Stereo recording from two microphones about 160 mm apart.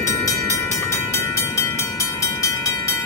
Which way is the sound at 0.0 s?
20° left (ahead or behind).